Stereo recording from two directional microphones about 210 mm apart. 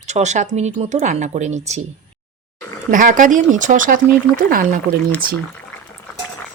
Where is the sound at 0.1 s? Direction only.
35° right (ahead or behind).